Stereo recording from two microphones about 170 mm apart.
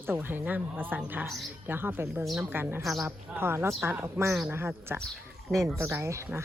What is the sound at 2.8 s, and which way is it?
Speech, centre (ahead or behind).